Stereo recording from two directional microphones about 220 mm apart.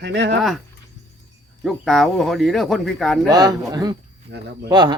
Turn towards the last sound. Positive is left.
turn(degrees=-20)  # may be behind; listen again after turning